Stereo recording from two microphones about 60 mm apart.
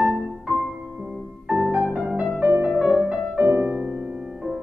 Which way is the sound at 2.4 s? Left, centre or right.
Right.